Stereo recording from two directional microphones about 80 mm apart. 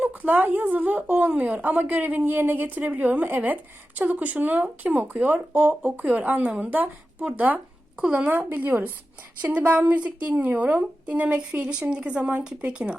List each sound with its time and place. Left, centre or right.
0.0 s a woman's voice: right